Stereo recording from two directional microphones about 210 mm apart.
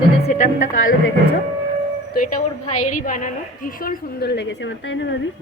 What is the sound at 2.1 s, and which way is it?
A woman's voice, 40° left (ahead or behind).